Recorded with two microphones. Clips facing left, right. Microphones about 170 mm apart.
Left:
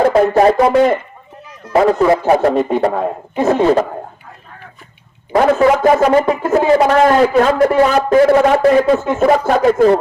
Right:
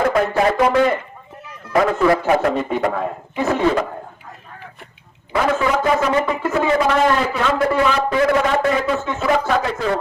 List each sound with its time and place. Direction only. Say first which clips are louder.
0.0 s a sound: left 6 dB; 30° left (ahead or behind)
1.7 s a man's voice: left 4 dB; 35° left (ahead or behind)
5.3 s speech: left 7 dB; 40° left (ahead or behind)